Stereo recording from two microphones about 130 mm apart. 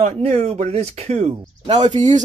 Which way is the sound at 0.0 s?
55° right (ahead or behind).